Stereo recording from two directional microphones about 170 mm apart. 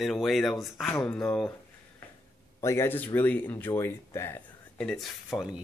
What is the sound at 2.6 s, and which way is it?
Speech, 15° left (ahead or behind).